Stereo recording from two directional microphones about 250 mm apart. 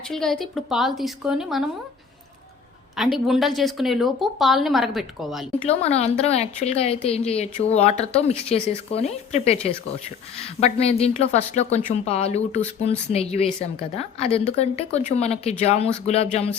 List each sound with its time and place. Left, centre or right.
0.1 s a woman's voice: centre
2.9 s a woman's voice: centre
5.5 s a woman's voice: left